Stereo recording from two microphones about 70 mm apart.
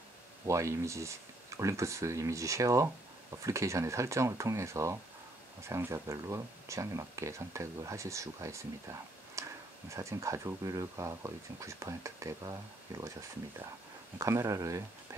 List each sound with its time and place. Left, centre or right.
0.5 s speech: right
14.1 s speech: right